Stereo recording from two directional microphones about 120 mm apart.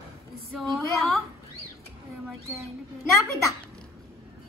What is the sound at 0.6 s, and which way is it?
Speech, centre (ahead or behind).